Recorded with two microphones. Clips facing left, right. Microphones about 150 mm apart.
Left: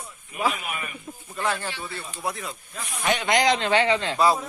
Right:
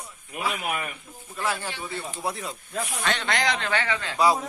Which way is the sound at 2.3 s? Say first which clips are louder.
Left 2 dB; 35° right (ahead or behind).